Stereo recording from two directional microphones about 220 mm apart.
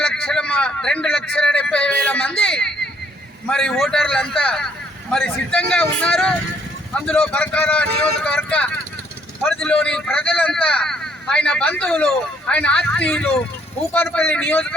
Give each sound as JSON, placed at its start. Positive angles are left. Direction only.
{"t": 0.0, "sound": "a man's voice", "side_deg": 5}